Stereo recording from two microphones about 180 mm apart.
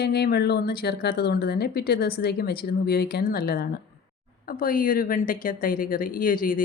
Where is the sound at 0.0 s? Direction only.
60° left (ahead or behind).